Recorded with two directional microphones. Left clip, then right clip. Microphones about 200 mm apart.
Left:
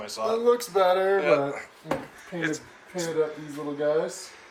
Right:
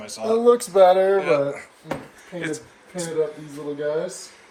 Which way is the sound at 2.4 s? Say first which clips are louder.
Even; centre (ahead or behind).